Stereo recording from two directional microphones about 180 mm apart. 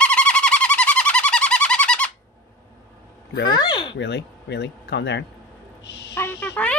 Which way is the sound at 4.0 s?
75° left (ahead or behind).